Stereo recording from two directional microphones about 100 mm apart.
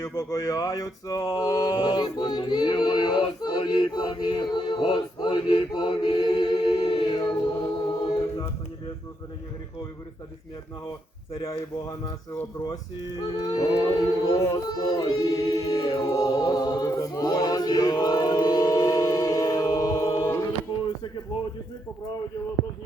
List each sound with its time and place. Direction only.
0.0 s a sound: 35° left (ahead or behind)
1.9 s choir: 50° left (ahead or behind)
4.8 s choir: 60° left (ahead or behind); by 7.7 s 40° left (ahead or behind)
11.3 s speech: 70° left (ahead or behind)
12.6 s a sound: 40° left (ahead or behind)
16.3 s choir: 45° left (ahead or behind)